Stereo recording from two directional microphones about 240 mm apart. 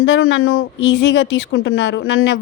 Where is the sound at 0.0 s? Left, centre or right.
Left.